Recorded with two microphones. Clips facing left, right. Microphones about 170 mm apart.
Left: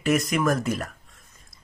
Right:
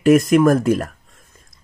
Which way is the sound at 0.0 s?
50° right (ahead or behind).